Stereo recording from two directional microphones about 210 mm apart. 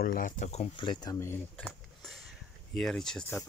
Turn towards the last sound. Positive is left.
turn(degrees=5)  # may be behind; listen again after turning